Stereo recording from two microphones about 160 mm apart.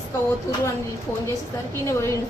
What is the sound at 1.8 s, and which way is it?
Speech, 20° left (ahead or behind).